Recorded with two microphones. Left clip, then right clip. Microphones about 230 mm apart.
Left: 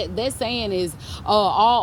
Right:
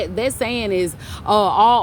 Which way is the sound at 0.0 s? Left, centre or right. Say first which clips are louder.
Right 3 dB; right.